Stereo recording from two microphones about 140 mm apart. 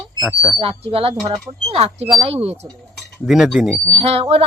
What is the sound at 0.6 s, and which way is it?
A woman's voice, 40° right (ahead or behind).